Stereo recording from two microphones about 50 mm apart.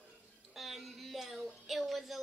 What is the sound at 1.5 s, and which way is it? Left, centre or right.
Speech, centre.